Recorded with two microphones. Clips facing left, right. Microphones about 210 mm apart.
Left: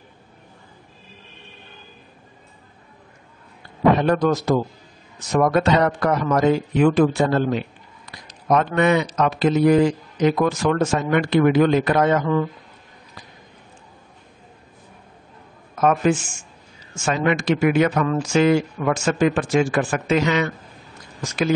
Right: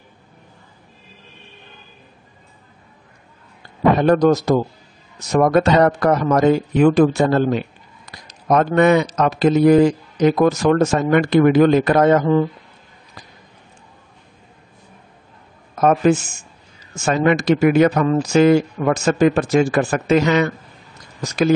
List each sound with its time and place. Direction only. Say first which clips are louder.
4.0 s a man's voice: right 5 dB; 40° right (ahead or behind)
15.8 s speech: right 3 dB; 40° right (ahead or behind)